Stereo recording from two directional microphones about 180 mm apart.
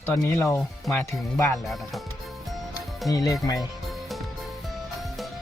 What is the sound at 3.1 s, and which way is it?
Speech, 20° left (ahead or behind).